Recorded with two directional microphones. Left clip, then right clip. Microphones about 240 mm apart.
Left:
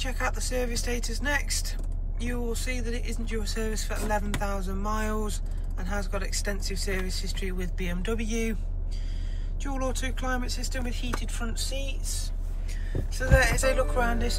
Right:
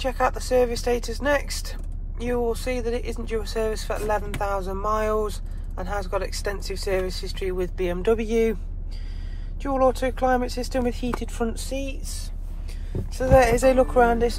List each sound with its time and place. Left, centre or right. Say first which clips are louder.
0.0 s speech: right 8 dB; centre
9.6 s speech: right 12 dB; centre; by 12.3 s right
13.3 s speech: right 8 dB; right